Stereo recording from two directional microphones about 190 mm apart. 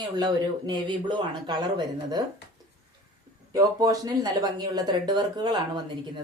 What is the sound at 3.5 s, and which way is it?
Speech, 20° right (ahead or behind).